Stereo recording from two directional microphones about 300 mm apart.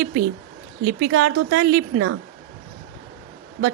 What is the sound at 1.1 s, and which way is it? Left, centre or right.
A woman's voice, right.